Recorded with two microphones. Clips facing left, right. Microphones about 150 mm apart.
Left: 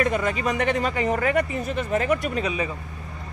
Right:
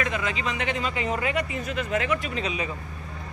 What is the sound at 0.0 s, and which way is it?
Speech, 45° left (ahead or behind).